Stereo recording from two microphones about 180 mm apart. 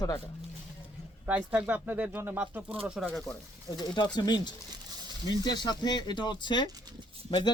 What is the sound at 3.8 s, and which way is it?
Speech, 25° left (ahead or behind).